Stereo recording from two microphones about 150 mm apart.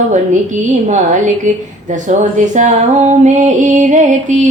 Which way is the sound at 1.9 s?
55° right (ahead or behind).